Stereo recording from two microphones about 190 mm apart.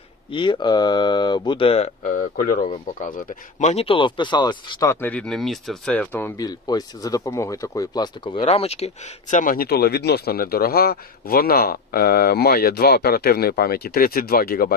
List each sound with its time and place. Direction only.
0.3 s speech: 25° left (ahead or behind)
2.0 s speech: 45° left (ahead or behind)